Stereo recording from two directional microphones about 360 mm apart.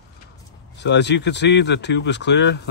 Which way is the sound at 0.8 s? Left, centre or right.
Left.